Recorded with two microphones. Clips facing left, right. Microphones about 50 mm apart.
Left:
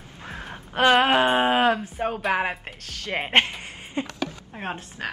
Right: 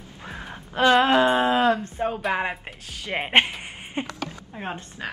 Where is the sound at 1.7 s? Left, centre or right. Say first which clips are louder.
Right 1 dB; centre.